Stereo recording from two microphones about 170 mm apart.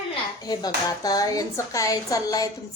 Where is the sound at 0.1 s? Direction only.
25° left (ahead or behind).